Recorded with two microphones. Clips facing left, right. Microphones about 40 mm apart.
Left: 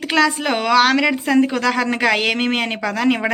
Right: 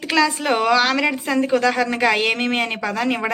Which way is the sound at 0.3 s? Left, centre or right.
Left.